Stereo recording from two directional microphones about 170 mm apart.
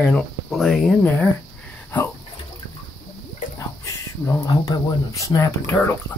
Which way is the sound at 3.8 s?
15° left (ahead or behind).